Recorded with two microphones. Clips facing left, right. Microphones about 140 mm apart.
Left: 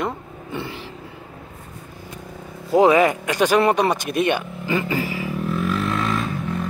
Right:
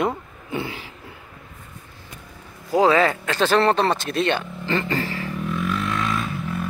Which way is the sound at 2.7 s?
20° left (ahead or behind).